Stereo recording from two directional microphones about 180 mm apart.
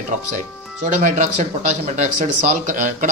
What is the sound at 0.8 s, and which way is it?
A man's voice, 45° right (ahead or behind).